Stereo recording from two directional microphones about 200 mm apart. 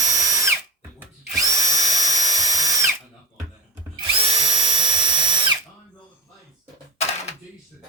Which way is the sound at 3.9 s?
30° right (ahead or behind).